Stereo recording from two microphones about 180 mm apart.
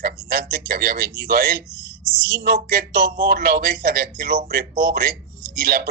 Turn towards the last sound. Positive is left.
turn(degrees=-55)  # may be behind; listen again after turning